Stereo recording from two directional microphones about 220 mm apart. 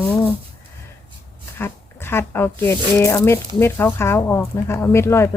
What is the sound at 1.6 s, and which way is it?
Speech, 10° left (ahead or behind).